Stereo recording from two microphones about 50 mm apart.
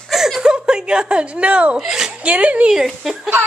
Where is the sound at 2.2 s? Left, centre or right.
Right.